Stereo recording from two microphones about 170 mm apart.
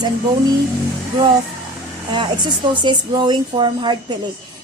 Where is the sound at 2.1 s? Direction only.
25° right (ahead or behind).